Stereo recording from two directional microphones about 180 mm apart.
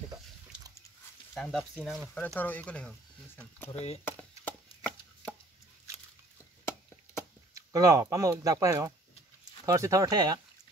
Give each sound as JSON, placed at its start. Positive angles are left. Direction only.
{"t": 1.3, "sound": "speech", "side_deg": 0}
{"t": 2.1, "sound": "speech", "side_deg": 10}
{"t": 4.0, "sound": "chopping", "side_deg": 10}
{"t": 7.5, "sound": "speech", "side_deg": -20}